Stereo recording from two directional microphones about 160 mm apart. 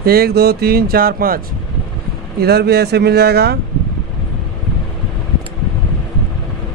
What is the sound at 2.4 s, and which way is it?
Speech, 85° right.